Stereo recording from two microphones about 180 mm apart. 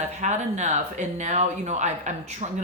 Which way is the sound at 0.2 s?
40° right (ahead or behind).